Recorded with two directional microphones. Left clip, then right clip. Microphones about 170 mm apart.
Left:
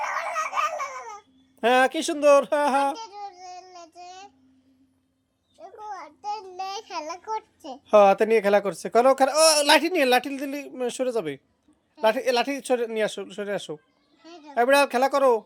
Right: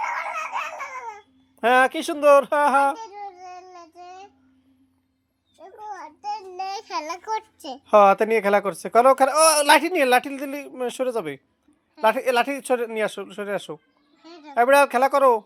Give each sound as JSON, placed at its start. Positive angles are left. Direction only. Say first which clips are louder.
{"t": 0.1, "sound": "laughter", "louder": "even", "side_deg": 25}
{"t": 1.6, "sound": "a sound", "louder": "right 2 dB", "side_deg": 10}
{"t": 5.9, "sound": "child singing", "louder": "right 2 dB", "side_deg": -5}
{"t": 6.7, "sound": "child singing", "louder": "right 5 dB", "side_deg": -30}
{"t": 7.9, "sound": "speech", "louder": "right 1 dB", "side_deg": 5}
{"t": 14.2, "sound": "a sound", "louder": "right 1 dB", "side_deg": -25}
{"t": 14.5, "sound": "speech", "louder": "right 3 dB", "side_deg": 5}